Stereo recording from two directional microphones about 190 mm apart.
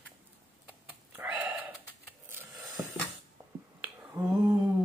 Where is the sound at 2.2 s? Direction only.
10° right (ahead or behind).